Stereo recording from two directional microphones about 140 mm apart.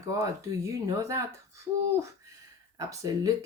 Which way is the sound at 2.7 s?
25° right (ahead or behind).